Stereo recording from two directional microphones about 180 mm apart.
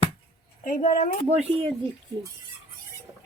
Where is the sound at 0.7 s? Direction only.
45° left (ahead or behind).